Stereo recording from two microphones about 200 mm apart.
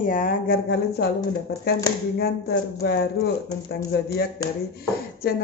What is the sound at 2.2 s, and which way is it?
Speech, 55° left (ahead or behind).